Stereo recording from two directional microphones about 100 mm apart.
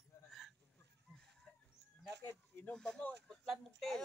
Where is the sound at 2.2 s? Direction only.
20° left (ahead or behind).